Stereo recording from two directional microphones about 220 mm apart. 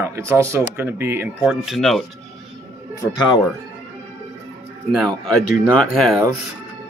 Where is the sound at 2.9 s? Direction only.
20° left (ahead or behind).